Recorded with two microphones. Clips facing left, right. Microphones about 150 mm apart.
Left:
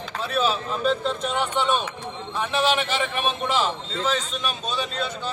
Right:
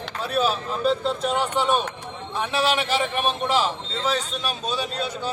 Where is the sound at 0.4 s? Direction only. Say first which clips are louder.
Even; 5° right (ahead or behind).